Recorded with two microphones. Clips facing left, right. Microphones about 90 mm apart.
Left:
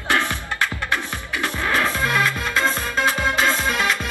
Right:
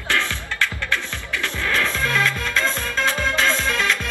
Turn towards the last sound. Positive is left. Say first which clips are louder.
# left 1 dB
turn(degrees=15)  # may be behind; listen again after turning